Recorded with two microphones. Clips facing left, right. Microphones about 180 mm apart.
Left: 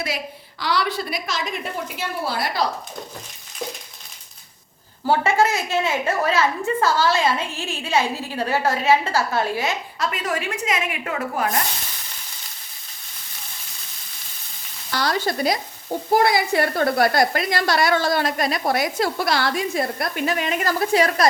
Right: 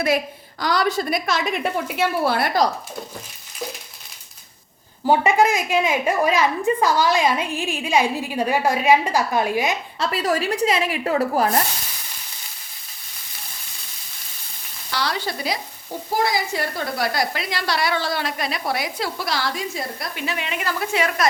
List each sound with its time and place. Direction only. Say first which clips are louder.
0.6 s a woman's voice: right 3 dB; 45° right (ahead or behind)
2.0 s a woman's voice: right 6 dB; 60° right (ahead or behind)
5.0 s a woman's voice: right 2 dB; 15° right (ahead or behind)
10.0 s speech: right 4 dB; 35° right (ahead or behind)
14.9 s a woman's voice: left 3 dB; 45° left (ahead or behind)
16.1 s a woman's voice: left 4 dB; 60° left (ahead or behind); by 21.2 s 35° left (ahead or behind)